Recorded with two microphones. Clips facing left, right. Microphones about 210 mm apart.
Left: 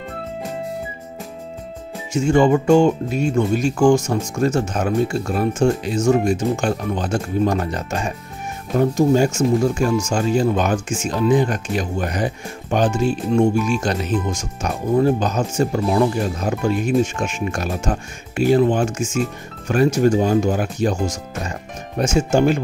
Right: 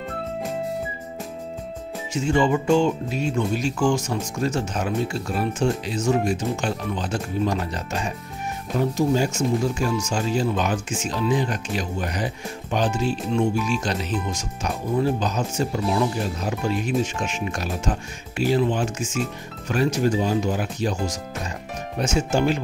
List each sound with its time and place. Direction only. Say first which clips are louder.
2.1 s speech: left 6 dB; 50° left (ahead or behind)